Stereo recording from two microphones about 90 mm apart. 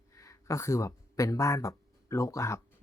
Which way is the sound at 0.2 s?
35° left (ahead or behind).